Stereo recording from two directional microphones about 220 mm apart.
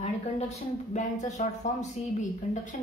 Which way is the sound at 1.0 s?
35° left (ahead or behind).